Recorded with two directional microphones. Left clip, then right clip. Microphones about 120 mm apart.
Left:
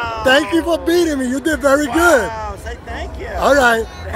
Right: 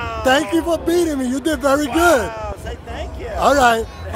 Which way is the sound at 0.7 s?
15° right (ahead or behind).